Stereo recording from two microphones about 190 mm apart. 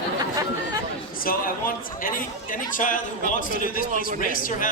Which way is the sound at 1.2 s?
50° left (ahead or behind).